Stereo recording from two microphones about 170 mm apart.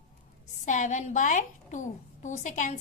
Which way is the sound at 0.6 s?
45° left (ahead or behind).